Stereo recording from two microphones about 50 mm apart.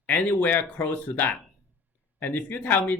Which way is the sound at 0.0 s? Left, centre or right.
Left.